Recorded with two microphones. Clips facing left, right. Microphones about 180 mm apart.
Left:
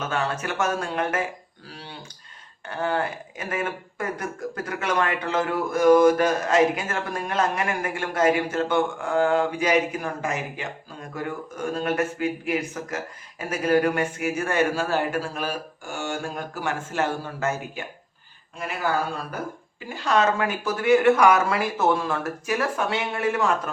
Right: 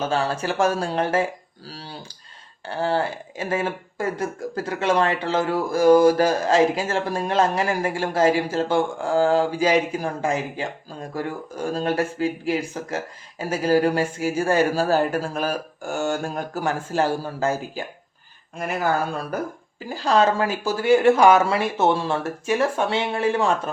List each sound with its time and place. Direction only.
0.0 s speech: 30° right (ahead or behind)
19.9 s speech: 35° right (ahead or behind)